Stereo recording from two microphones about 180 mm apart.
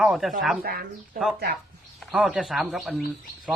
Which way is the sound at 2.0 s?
Centre (ahead or behind).